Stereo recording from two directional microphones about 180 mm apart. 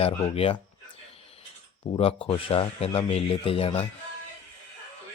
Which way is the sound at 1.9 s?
30° left (ahead or behind).